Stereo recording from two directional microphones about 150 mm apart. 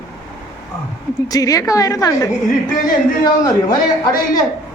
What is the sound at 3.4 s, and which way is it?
Speech, 25° left (ahead or behind).